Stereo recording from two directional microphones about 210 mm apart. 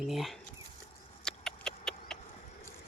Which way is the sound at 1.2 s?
5° left (ahead or behind).